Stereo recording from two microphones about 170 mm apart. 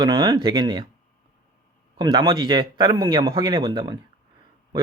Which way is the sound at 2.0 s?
25° right (ahead or behind).